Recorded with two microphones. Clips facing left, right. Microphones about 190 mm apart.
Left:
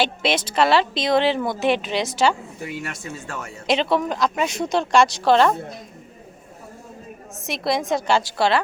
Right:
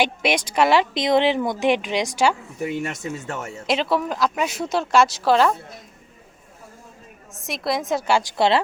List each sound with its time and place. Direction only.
0.0 s speech: 15° right (ahead or behind)
3.7 s speech: centre (ahead or behind)
7.3 s speech: centre (ahead or behind)
8.4 s speech: 25° right (ahead or behind)